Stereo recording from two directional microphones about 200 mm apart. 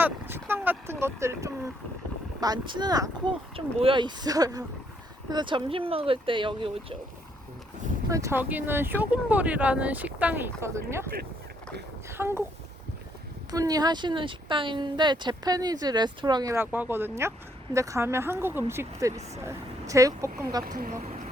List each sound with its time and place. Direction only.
0.0 s speech: 10° right (ahead or behind)
8.1 s speech: 15° right (ahead or behind)
12.1 s speech: 10° right (ahead or behind)
13.5 s speech: 20° right (ahead or behind)
20.7 s speech: 45° right (ahead or behind)